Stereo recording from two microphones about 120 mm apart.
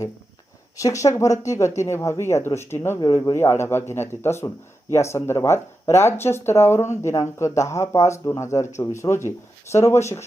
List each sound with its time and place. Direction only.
0.8 s a man's voice: 25° left (ahead or behind)